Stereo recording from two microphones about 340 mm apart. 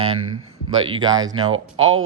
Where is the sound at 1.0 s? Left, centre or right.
Centre.